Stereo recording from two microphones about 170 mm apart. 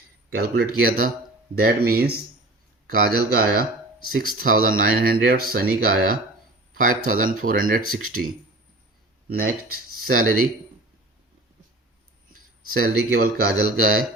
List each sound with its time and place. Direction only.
0.3 s speech: 65° right (ahead or behind)
9.3 s speech: 60° right (ahead or behind)
12.7 s speech: 60° right (ahead or behind)